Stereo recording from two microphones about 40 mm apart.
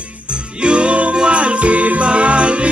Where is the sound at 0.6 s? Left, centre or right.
Right.